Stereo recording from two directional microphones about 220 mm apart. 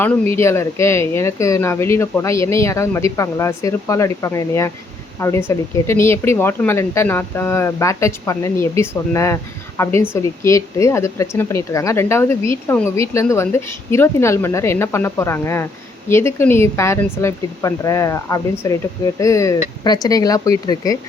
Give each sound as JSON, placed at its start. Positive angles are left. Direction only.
{"t": 0.3, "sound": "speech", "side_deg": 10}